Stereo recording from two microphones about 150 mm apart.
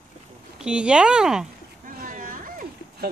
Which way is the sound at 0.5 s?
5° right (ahead or behind).